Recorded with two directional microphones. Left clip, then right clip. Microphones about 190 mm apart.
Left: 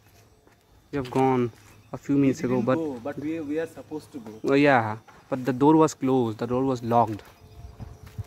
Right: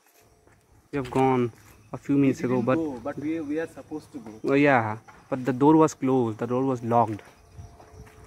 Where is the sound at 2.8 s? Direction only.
40° left (ahead or behind).